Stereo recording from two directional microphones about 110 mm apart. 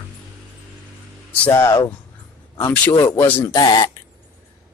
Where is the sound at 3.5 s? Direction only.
40° left (ahead or behind).